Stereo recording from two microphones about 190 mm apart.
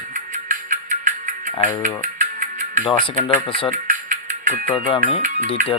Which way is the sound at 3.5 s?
30° left (ahead or behind).